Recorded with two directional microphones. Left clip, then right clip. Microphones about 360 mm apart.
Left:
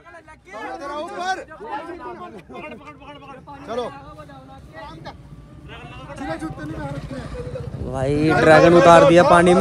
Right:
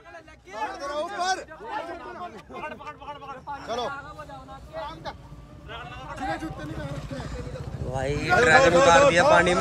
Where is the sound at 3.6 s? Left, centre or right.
Left.